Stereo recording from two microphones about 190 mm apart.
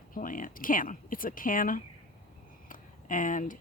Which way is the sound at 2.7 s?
45° left (ahead or behind).